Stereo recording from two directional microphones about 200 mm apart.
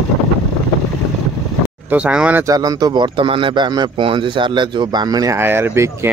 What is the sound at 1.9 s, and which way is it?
Speech, 5° right (ahead or behind).